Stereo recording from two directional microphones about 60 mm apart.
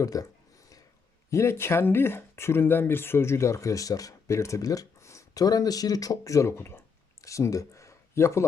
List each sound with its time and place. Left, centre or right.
0.0 s speech: left
1.3 s speech: left
4.3 s speech: left
7.2 s speech: left